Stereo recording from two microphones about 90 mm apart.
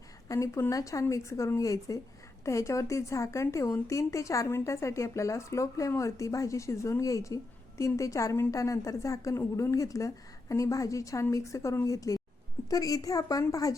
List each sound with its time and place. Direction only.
0.3 s a woman's voice: 35° left (ahead or behind)